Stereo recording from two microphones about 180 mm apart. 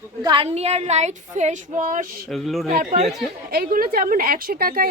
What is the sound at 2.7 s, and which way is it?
A woman's voice, 55° right (ahead or behind).